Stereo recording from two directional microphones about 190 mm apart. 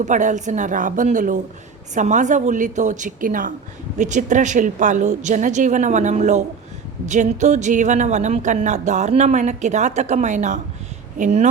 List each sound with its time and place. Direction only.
0.0 s a woman's voice: 40° right (ahead or behind)